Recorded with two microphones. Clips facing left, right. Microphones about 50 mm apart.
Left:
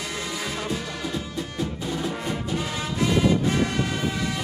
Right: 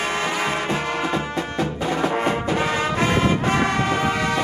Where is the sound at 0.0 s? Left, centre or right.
Right.